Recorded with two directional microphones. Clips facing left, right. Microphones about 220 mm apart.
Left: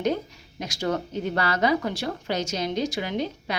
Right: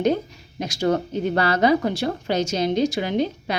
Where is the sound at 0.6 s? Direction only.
30° right (ahead or behind).